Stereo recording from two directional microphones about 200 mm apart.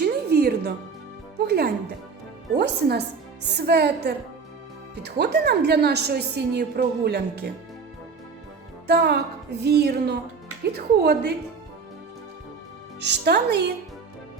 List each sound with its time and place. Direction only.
0.0 s music: 50° right (ahead or behind)
1.5 s a woman's voice: 55° right (ahead or behind)
8.9 s a woman's voice: 55° right (ahead or behind)
13.0 s a woman's voice: 55° right (ahead or behind)